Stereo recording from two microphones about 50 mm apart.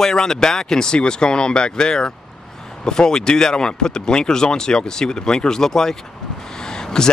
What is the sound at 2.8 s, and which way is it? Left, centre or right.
Speech, centre.